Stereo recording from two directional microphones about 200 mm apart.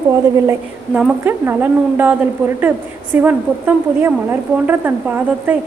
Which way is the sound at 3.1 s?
10° right (ahead or behind).